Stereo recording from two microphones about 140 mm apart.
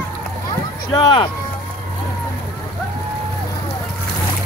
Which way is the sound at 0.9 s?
35° left (ahead or behind).